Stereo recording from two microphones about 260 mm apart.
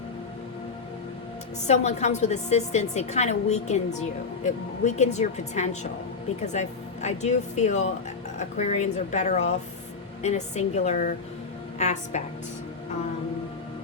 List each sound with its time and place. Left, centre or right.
1.6 s a woman's voice: left